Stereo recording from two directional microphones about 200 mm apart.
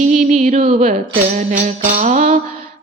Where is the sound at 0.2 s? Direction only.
35° right (ahead or behind).